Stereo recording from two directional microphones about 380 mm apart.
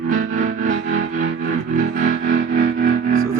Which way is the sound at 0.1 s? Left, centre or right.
Right.